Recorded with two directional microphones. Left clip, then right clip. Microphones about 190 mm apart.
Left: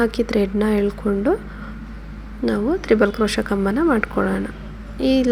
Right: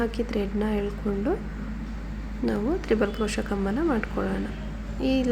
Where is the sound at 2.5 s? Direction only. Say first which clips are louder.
Left 7 dB; 15° left (ahead or behind).